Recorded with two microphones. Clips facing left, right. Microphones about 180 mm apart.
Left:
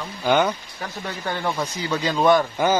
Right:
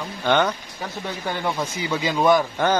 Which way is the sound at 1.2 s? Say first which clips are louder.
Even; 10° right (ahead or behind).